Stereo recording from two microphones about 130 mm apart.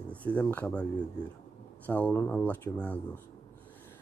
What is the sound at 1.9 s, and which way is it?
Speech, 10° left (ahead or behind).